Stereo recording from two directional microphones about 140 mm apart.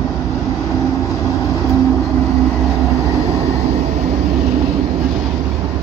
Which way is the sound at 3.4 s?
50° right (ahead or behind).